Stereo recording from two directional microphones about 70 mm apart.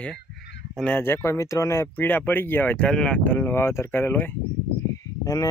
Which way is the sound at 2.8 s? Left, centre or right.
Centre.